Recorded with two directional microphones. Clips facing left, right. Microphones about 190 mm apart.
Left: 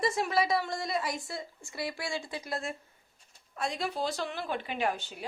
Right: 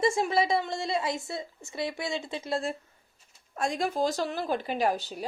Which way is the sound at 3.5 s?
45° right (ahead or behind).